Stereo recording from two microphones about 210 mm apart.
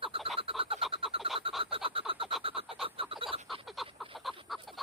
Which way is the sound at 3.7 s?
Centre (ahead or behind).